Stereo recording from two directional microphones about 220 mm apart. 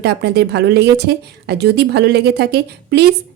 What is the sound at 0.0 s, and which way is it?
A woman's voice, 50° right (ahead or behind).